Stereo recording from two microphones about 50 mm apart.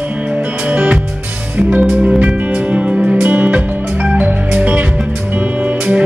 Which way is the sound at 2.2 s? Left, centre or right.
Right.